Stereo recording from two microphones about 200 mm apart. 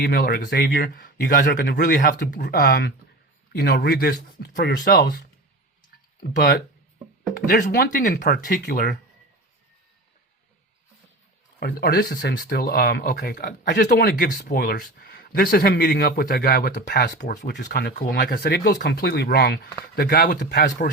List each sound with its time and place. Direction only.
0.0 s speech: 50° left (ahead or behind)
11.6 s speech: 50° left (ahead or behind)